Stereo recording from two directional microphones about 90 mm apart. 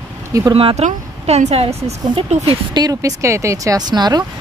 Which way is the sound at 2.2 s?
75° right (ahead or behind).